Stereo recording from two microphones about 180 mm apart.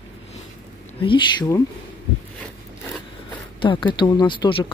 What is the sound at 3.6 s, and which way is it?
Speech, 25° left (ahead or behind).